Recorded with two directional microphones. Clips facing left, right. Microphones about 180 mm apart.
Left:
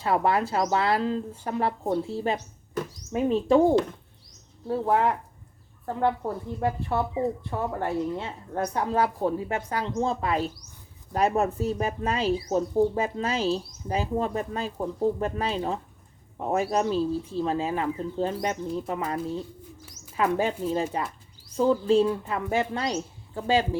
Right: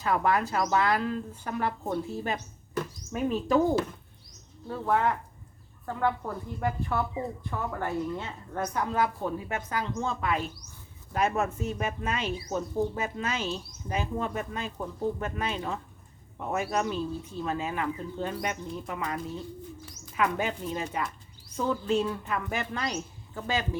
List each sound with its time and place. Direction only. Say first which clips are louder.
0.0 s a woman's voice: left 2 dB; 30° left (ahead or behind)